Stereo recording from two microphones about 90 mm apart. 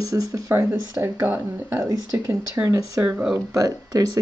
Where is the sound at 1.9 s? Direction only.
50° right (ahead or behind).